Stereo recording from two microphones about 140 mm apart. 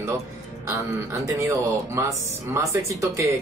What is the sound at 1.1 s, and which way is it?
Speech, 20° right (ahead or behind).